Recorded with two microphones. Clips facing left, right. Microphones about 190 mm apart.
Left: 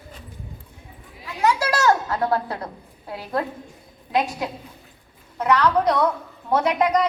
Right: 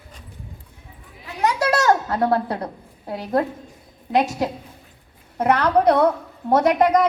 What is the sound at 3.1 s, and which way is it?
Speech, 40° right (ahead or behind).